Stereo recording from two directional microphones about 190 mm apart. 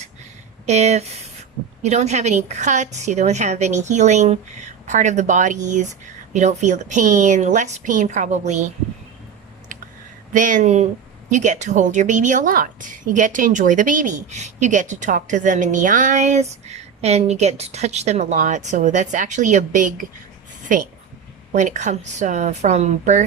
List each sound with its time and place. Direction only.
0.6 s a woman's voice: 35° right (ahead or behind)
10.3 s a woman's voice: 40° right (ahead or behind)
21.5 s a woman's voice: 40° right (ahead or behind)